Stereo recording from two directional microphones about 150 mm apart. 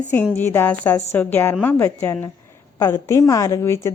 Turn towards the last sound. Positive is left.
turn(degrees=20)  # may be behind; listen again after turning